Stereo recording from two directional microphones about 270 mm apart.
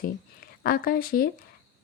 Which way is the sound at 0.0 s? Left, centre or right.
Left.